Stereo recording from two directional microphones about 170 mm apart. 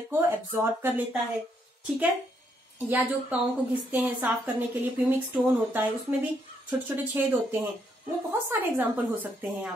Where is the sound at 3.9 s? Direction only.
5° right (ahead or behind).